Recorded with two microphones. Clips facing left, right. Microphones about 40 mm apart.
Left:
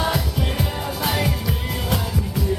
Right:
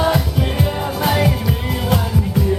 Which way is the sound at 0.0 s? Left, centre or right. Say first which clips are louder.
Right 5 dB; centre.